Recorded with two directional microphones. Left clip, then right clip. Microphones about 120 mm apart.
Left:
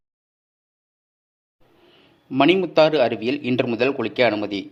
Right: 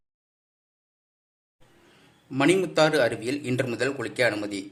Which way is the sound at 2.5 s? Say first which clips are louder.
Left 4 dB; 35° left (ahead or behind).